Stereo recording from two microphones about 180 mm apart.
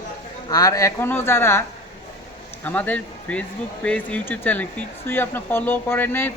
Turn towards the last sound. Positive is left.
turn(degrees=10)  # may be behind; listen again after turning